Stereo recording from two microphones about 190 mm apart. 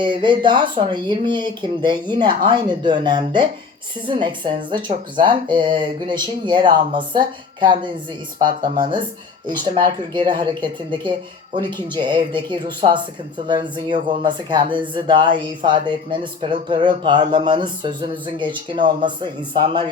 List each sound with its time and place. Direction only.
0.0 s speech: 25° right (ahead or behind)
9.5 s speech: 25° right (ahead or behind)